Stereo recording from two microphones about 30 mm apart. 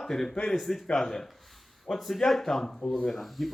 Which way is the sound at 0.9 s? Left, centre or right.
Centre.